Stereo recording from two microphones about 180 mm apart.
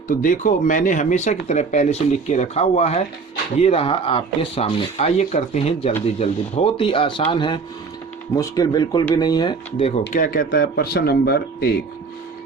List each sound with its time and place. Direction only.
0.1 s speech: 50° left (ahead or behind); by 10.0 s 30° left (ahead or behind)
10.1 s speech: 50° left (ahead or behind)